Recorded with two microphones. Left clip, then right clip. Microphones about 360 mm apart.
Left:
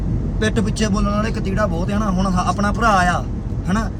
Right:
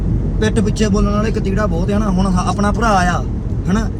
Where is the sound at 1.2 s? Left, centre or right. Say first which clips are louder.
Right 2 dB; right.